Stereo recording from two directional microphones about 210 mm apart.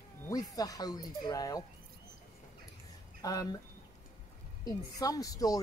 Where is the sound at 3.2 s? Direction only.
15° left (ahead or behind).